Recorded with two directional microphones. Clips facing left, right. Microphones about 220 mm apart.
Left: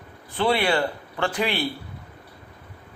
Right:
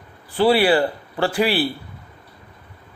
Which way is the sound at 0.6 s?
35° right (ahead or behind).